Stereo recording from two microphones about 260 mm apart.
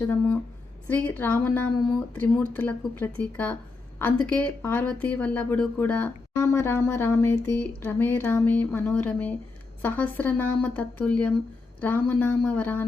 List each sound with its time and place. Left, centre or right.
0.9 s speech: centre